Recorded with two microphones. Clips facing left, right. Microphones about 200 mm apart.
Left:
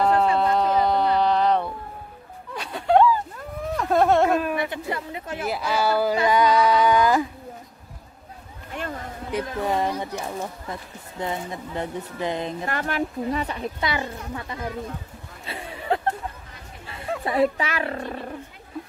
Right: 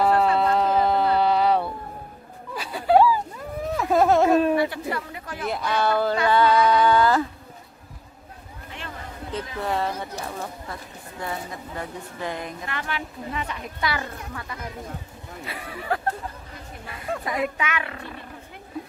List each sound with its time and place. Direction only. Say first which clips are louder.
0.0 s a sound: even; 5° right (ahead or behind)
2.5 s snicker: right 1 dB; 5° right (ahead or behind)
4.6 s a woman's voice: right 3 dB; 20° left (ahead or behind)
5.5 s speech: even; 5° left (ahead or behind)
6.2 s a sound: right 1 dB; 10° left (ahead or behind)
9.6 s speech: left 1 dB; 15° left (ahead or behind)
12.6 s speech: left 6 dB; 45° left (ahead or behind)
13.8 s speech: right 1 dB; 20° left (ahead or behind)
15.4 s a sound: left 2 dB; 25° left (ahead or behind)
17.2 s speech: left 7 dB; 30° left (ahead or behind)